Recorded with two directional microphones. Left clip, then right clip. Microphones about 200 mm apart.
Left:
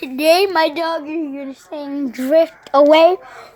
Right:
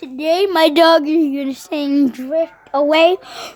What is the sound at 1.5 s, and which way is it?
Speech, 25° right (ahead or behind).